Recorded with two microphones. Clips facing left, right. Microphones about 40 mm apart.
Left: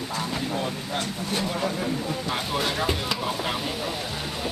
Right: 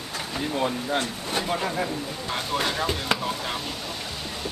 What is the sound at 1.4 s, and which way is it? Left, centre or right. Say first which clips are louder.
Speech: right 2 dB; centre.